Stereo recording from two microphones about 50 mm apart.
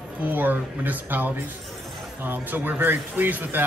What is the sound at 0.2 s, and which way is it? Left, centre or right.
Speech, right.